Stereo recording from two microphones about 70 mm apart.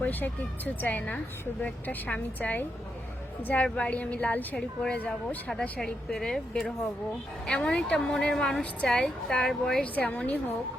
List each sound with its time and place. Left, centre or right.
0.0 s a woman's voice: left
6.1 s a woman's voice: centre
9.8 s a woman's voice: left